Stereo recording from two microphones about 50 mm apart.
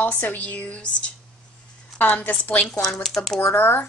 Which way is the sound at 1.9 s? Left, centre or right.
Left.